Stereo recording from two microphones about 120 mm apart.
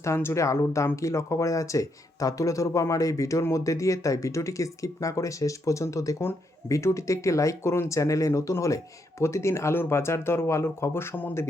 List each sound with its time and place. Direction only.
0.0 s speech: 20° left (ahead or behind)